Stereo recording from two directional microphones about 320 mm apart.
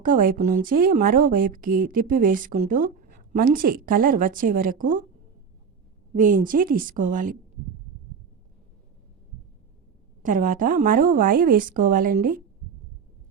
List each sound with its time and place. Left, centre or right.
0.0 s speech: right
6.1 s speech: right
10.2 s speech: right